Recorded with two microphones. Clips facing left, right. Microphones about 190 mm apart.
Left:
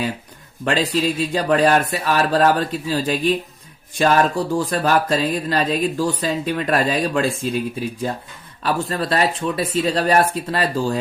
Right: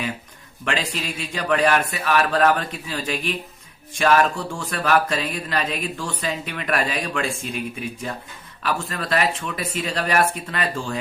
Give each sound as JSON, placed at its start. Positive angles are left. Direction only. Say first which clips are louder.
{"t": 0.6, "sound": "speech", "louder": "left 7 dB", "side_deg": 35}